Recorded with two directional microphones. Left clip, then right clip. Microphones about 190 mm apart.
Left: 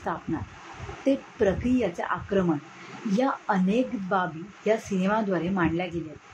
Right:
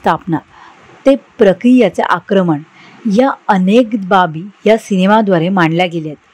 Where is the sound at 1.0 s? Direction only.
45° right (ahead or behind).